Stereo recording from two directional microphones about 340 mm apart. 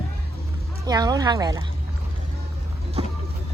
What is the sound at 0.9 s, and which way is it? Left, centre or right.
Speech, centre.